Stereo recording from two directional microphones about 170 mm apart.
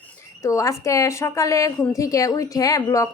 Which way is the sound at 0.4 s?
20° left (ahead or behind).